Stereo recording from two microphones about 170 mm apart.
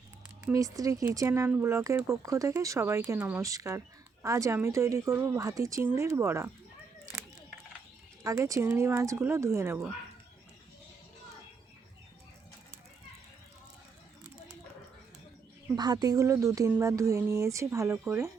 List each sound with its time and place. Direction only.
0.4 s speech: 20° right (ahead or behind)
8.2 s speech: 20° right (ahead or behind)
15.7 s speech: 25° right (ahead or behind)